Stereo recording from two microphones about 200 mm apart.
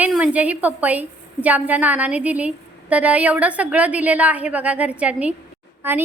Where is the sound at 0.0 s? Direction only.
5° right (ahead or behind).